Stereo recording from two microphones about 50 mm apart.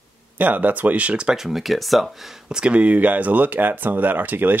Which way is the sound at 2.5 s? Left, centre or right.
Right.